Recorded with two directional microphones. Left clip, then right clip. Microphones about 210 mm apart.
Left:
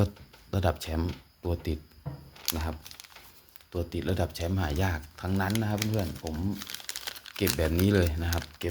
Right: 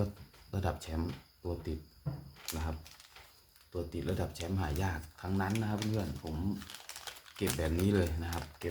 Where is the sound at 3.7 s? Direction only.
40° left (ahead or behind).